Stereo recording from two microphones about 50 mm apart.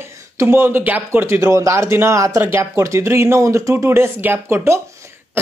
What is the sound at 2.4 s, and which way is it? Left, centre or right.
Speech, right.